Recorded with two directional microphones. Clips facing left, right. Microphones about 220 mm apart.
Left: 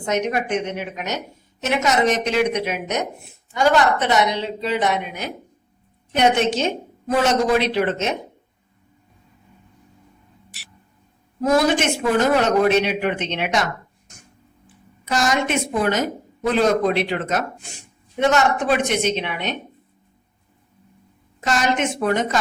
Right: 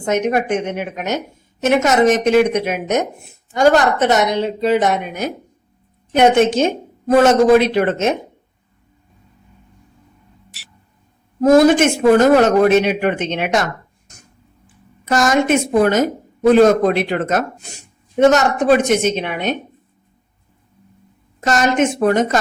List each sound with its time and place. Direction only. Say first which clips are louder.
0.0 s a woman's voice: right 5 dB; 50° right (ahead or behind)
11.3 s a woman's voice: right 8 dB; 50° right (ahead or behind)
15.0 s a woman's voice: right 6 dB; 50° right (ahead or behind)
21.4 s a woman's voice: right 5 dB; 45° right (ahead or behind)